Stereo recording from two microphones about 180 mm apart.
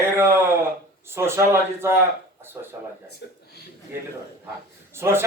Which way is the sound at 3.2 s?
75° left (ahead or behind).